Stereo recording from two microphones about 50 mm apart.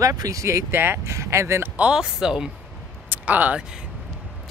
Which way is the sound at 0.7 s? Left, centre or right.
Right.